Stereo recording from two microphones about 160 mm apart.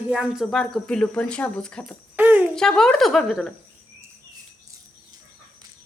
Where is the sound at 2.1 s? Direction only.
10° right (ahead or behind).